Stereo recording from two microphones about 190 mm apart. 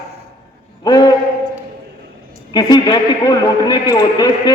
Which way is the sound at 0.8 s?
20° left (ahead or behind).